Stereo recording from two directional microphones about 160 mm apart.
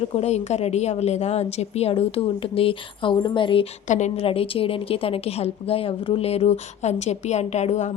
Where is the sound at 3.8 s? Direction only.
50° left (ahead or behind).